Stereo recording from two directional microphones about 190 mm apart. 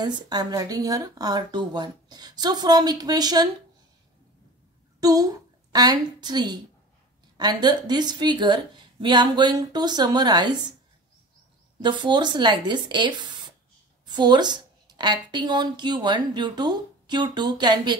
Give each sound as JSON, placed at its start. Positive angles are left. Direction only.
{"t": 0.0, "sound": "a woman's voice", "side_deg": -20}
{"t": 5.0, "sound": "a woman's voice", "side_deg": -20}
{"t": 11.8, "sound": "a woman's voice", "side_deg": -25}